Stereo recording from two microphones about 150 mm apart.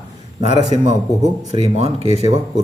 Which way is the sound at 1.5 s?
45° right (ahead or behind).